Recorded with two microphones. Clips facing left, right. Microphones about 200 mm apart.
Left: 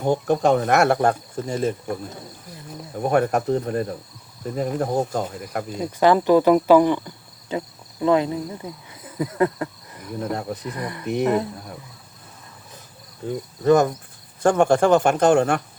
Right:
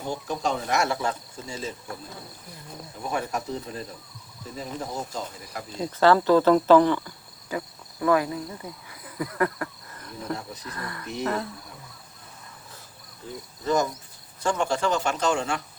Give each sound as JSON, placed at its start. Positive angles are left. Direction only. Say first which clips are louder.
{"t": 0.0, "sound": "speech", "louder": "left 10 dB", "side_deg": 55}
{"t": 3.0, "sound": "speech", "louder": "left 10 dB", "side_deg": 60}
{"t": 5.7, "sound": "speech", "louder": "left 2 dB", "side_deg": 15}
{"t": 10.3, "sound": "speech", "louder": "left 8 dB", "side_deg": 60}
{"t": 10.7, "sound": "speech", "louder": "left 7 dB", "side_deg": 20}
{"t": 13.2, "sound": "speech", "louder": "left 11 dB", "side_deg": 55}